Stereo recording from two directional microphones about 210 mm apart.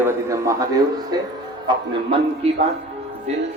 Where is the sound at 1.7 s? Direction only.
20° right (ahead or behind).